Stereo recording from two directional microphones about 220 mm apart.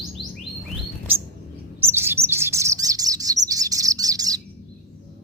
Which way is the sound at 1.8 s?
10° right (ahead or behind).